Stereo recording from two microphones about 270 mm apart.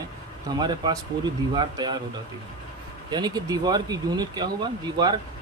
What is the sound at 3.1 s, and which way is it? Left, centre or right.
Speech, centre.